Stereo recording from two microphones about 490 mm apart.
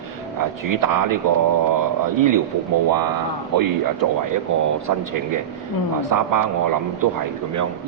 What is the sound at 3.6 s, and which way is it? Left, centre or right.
A man's voice, right.